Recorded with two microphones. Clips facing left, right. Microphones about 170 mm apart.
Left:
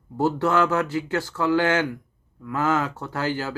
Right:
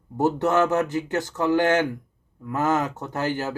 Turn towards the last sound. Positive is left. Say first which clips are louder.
# right 1 dB
turn(degrees=-20)  # may be behind; listen again after turning